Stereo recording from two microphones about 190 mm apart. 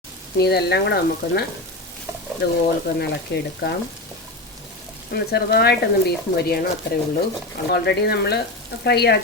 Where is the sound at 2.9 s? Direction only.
60° left (ahead or behind).